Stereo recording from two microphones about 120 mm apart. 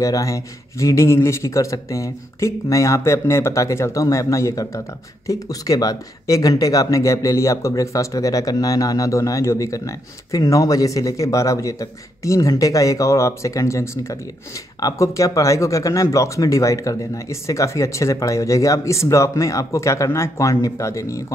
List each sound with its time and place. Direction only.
0.0 s a man's voice: 25° left (ahead or behind)